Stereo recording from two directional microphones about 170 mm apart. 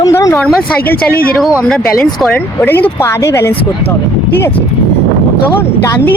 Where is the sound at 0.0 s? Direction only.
20° left (ahead or behind).